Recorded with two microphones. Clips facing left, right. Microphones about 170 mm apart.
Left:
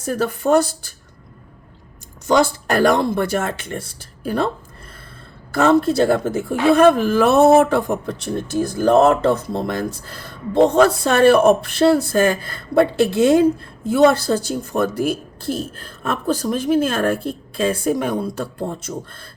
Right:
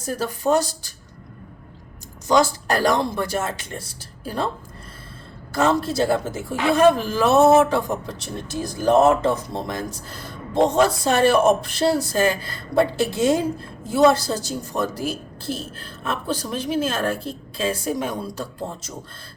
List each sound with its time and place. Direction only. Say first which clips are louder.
0.0 s speech: left 3 dB; 65° left (ahead or behind)
2.2 s speech: left 2 dB; 60° left (ahead or behind)
5.5 s speech: left 5 dB; 60° left (ahead or behind)